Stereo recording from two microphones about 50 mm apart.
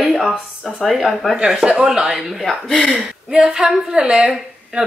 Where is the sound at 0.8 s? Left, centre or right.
Centre.